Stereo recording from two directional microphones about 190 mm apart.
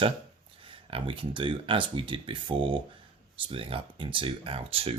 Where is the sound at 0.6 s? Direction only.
30° right (ahead or behind).